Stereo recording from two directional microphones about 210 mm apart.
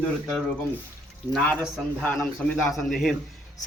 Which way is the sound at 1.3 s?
Centre (ahead or behind).